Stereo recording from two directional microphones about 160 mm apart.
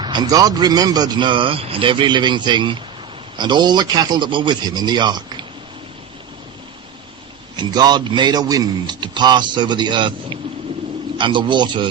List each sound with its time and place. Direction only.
0.0 s a man's voice: 25° right (ahead or behind)
7.5 s a man's voice: 25° right (ahead or behind)